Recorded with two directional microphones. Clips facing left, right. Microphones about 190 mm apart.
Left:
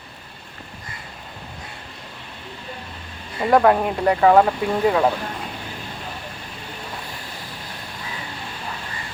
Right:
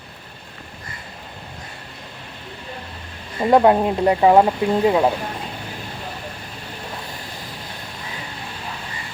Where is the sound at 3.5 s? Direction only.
20° right (ahead or behind).